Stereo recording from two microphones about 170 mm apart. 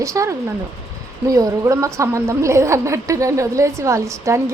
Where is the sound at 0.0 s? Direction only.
20° right (ahead or behind).